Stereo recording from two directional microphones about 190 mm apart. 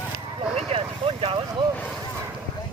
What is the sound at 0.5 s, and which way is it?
Vehicle, 30° right (ahead or behind).